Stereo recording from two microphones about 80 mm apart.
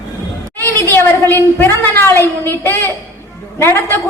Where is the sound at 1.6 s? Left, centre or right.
Left.